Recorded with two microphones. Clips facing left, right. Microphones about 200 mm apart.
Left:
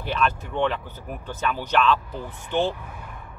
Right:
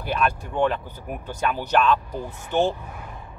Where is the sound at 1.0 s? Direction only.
10° right (ahead or behind).